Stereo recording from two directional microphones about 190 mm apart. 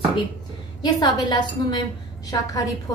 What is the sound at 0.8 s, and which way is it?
A woman's voice, 20° left (ahead or behind).